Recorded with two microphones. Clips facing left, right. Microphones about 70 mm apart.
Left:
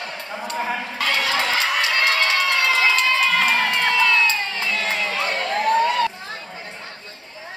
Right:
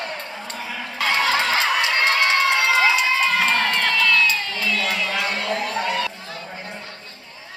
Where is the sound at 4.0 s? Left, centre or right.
Left.